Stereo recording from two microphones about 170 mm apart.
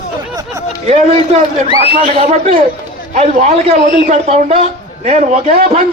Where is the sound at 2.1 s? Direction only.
35° right (ahead or behind).